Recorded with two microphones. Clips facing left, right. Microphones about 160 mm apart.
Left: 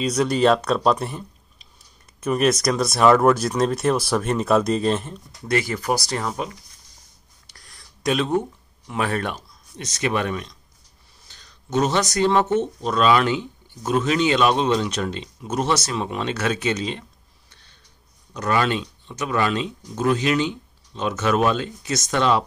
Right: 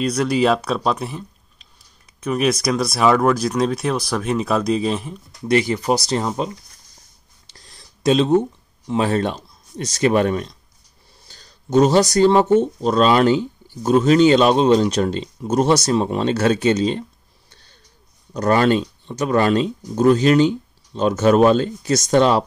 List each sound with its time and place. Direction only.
0.0 s speech: centre (ahead or behind)
5.5 s speech: 20° right (ahead or behind)
7.5 s speech: 25° right (ahead or behind)
17.5 s a sound: 35° right (ahead or behind)
18.3 s speech: 40° right (ahead or behind)